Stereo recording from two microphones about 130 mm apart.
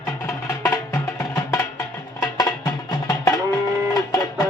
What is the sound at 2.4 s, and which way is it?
Music, 30° left (ahead or behind).